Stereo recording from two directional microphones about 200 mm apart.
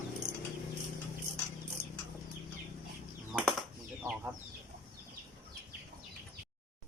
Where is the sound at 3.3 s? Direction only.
Centre (ahead or behind).